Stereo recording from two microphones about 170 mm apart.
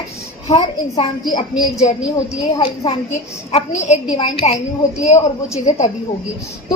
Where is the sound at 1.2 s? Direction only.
25° left (ahead or behind).